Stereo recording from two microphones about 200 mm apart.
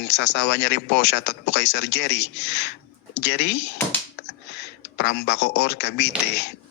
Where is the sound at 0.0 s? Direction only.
60° left (ahead or behind).